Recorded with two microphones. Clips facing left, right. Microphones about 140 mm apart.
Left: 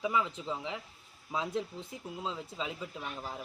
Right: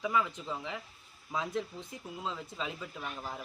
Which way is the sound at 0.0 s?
15° left (ahead or behind).